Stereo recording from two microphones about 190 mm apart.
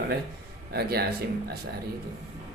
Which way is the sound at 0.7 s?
55° right (ahead or behind).